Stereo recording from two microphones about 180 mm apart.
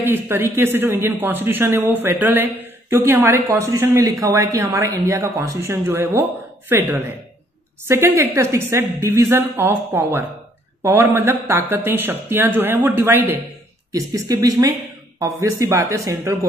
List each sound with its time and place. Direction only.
0.0 s speech: 10° right (ahead or behind)
7.9 s speech: 15° right (ahead or behind)